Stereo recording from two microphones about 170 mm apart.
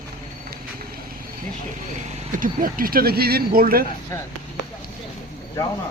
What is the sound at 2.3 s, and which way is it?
Speech, 55° right (ahead or behind).